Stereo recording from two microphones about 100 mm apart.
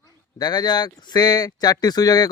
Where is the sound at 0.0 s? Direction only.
45° left (ahead or behind).